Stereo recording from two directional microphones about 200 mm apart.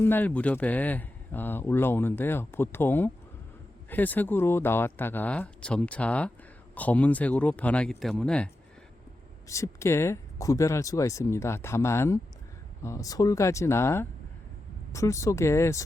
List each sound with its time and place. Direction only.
0.0 s speech: 10° left (ahead or behind)
9.5 s speech: 15° left (ahead or behind)